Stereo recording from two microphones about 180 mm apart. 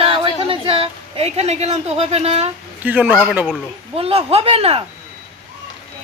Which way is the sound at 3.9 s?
35° right (ahead or behind).